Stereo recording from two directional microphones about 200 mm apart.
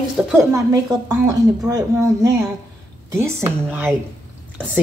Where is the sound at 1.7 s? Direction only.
15° right (ahead or behind).